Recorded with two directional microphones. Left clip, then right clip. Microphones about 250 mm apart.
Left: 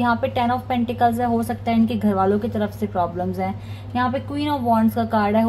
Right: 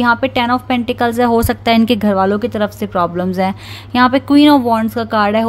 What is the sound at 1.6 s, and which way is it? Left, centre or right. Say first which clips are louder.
Speech: right 8 dB; right.